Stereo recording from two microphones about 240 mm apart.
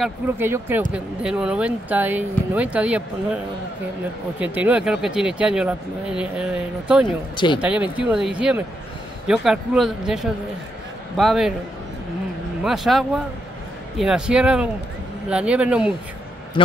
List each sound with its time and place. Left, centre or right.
0.0 s speech: centre
4.4 s speech: centre
7.3 s speech: centre
7.6 s speech: centre
12.6 s speech: centre
16.6 s speech: left